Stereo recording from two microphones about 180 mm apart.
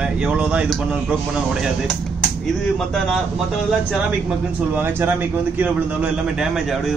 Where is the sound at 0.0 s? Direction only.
5° right (ahead or behind).